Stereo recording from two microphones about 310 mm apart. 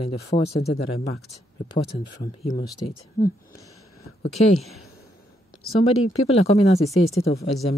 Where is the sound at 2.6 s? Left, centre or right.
Centre.